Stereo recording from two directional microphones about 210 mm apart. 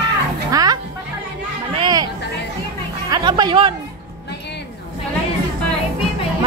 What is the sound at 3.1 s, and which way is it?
Speech, 20° right (ahead or behind).